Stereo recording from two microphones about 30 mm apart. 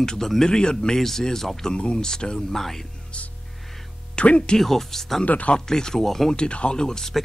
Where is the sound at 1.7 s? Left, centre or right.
Left.